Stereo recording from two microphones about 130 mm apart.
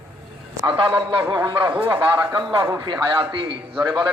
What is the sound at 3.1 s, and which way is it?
Speech, 40° right (ahead or behind).